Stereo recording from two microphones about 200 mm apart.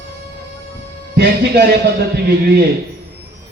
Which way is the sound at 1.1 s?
55° right (ahead or behind).